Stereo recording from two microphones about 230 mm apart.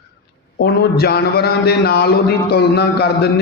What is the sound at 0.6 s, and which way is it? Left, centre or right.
A man's voice, left.